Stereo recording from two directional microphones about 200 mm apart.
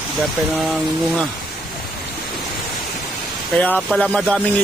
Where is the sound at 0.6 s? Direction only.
Centre (ahead or behind).